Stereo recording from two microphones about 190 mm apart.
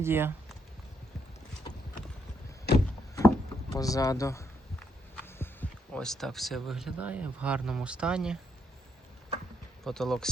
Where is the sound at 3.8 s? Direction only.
20° left (ahead or behind).